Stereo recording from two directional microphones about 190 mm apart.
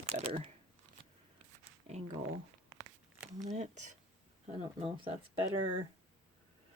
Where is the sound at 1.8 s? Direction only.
35° right (ahead or behind).